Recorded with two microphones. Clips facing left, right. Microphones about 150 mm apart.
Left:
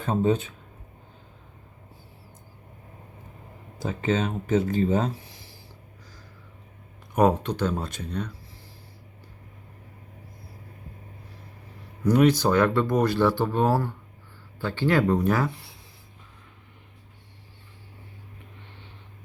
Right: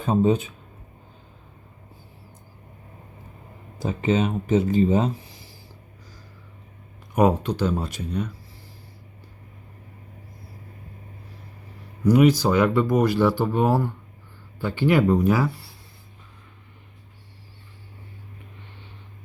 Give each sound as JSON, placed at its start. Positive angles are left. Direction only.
{"t": 0.0, "sound": "speech", "side_deg": -15}
{"t": 3.8, "sound": "speech", "side_deg": -15}
{"t": 7.2, "sound": "speech", "side_deg": -10}
{"t": 12.0, "sound": "speech", "side_deg": -10}